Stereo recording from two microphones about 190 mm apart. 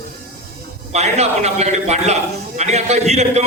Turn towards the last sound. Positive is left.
turn(degrees=-35)  # may be behind; listen again after turning